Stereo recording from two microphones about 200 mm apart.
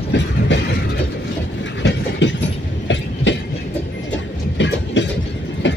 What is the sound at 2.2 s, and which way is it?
Train, 60° left (ahead or behind).